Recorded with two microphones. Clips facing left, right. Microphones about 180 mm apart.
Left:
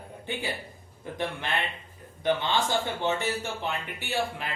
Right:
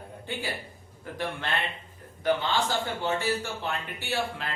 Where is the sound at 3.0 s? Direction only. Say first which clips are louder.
Even; 20° left (ahead or behind).